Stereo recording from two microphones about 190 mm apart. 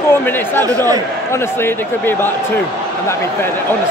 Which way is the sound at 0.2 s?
10° left (ahead or behind).